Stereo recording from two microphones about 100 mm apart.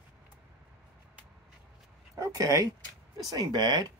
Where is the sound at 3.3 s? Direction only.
45° right (ahead or behind).